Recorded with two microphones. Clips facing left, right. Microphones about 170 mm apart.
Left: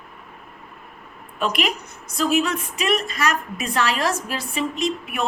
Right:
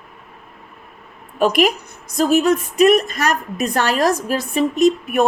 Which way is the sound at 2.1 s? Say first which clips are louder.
Right 6 dB; 40° right (ahead or behind).